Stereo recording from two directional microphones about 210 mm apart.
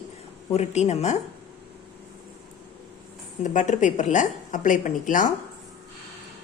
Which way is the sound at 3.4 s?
35° left (ahead or behind).